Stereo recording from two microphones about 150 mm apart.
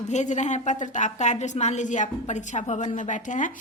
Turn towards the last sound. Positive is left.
turn(degrees=55)  # may be behind; listen again after turning